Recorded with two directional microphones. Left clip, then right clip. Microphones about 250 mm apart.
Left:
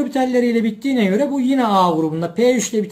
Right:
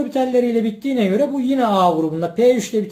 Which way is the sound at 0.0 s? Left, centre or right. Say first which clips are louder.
Even; left.